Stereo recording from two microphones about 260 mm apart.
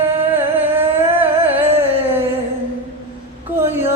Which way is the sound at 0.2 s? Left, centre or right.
Centre.